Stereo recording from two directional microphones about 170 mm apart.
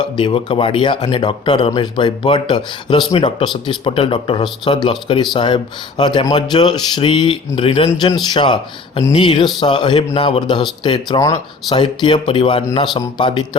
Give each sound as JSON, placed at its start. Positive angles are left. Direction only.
{"t": 0.0, "sound": "speech", "side_deg": 25}